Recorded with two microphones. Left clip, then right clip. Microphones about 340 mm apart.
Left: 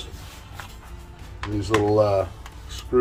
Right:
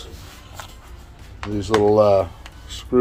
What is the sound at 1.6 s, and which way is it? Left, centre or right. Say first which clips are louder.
Speech: right 4 dB; right.